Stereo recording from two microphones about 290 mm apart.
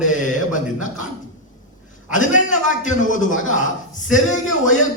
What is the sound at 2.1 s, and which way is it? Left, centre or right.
A man's voice, left.